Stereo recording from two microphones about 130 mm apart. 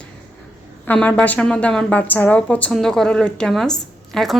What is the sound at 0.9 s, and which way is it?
A woman's voice, 10° left (ahead or behind).